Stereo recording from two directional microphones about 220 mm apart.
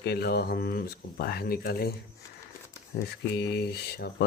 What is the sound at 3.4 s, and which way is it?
Speech, 50° left (ahead or behind).